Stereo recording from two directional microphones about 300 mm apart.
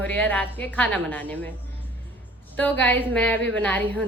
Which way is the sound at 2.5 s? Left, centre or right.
Centre.